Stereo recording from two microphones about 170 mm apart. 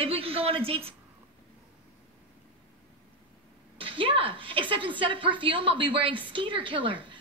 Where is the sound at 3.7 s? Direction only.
30° right (ahead or behind).